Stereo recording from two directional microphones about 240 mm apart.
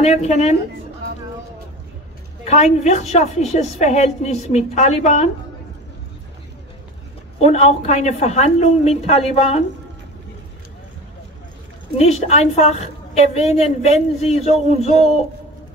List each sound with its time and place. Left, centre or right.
0.0 s a woman's voice: left
2.4 s a woman's voice: left
7.3 s a woman's voice: left
12.0 s a woman's voice: left